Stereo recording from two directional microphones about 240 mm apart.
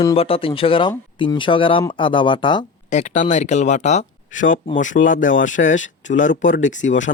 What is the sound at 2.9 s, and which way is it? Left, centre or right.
Speech, left.